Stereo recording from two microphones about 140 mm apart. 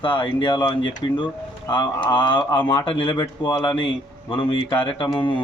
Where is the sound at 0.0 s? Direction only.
35° left (ahead or behind).